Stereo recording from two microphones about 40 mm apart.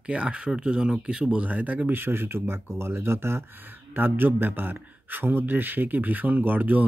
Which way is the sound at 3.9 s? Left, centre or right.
Right.